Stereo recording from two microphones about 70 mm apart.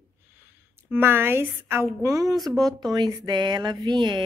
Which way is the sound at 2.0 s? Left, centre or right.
Right.